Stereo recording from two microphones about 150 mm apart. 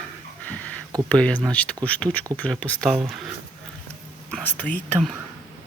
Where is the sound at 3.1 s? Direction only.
5° right (ahead or behind).